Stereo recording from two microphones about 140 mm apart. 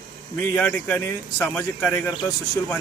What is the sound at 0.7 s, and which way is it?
Speech, 15° left (ahead or behind).